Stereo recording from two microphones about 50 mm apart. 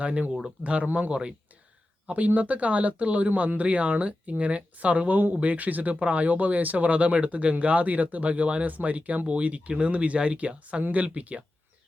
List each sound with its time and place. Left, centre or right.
0.0 s speech: right
2.0 s speech: right